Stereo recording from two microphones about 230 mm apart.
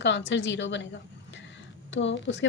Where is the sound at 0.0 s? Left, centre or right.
Left.